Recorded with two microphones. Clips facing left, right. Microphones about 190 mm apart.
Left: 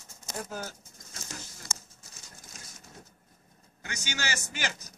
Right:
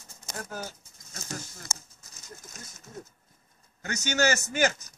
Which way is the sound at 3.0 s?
45° right (ahead or behind).